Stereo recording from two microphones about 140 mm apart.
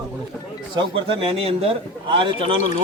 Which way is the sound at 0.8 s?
40° right (ahead or behind).